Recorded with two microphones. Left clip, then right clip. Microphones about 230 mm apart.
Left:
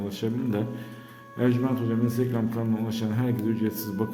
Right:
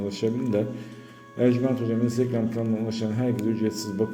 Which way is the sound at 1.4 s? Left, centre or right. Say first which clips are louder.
Right 3 dB; centre.